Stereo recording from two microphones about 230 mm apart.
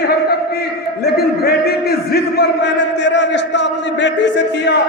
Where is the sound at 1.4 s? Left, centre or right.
Left.